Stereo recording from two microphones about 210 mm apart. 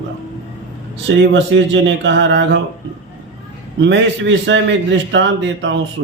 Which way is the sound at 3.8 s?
60° right (ahead or behind).